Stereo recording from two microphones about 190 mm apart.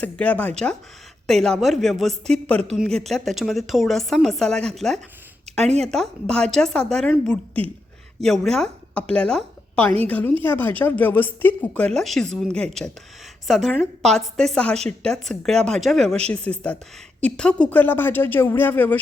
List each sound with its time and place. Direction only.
0.0 s a woman's voice: 5° left (ahead or behind)